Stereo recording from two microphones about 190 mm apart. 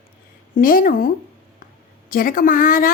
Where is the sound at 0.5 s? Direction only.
45° left (ahead or behind).